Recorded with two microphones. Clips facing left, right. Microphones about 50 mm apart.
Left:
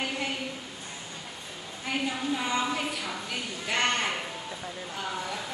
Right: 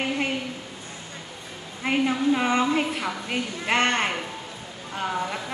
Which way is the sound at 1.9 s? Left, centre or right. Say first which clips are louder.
Right 8 dB; right.